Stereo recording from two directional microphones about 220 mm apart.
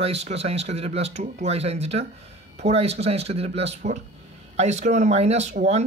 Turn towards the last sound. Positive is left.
turn(degrees=-30)  # may be behind; listen again after turning